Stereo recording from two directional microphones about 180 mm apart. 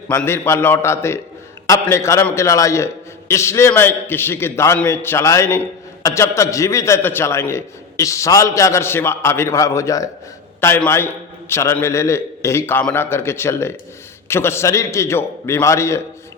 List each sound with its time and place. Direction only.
0.1 s a man's voice: 15° left (ahead or behind)